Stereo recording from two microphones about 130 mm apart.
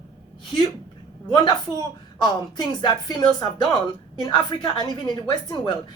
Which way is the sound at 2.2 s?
35° left (ahead or behind).